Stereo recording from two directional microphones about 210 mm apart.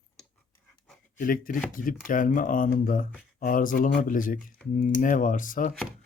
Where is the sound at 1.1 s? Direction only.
40° left (ahead or behind).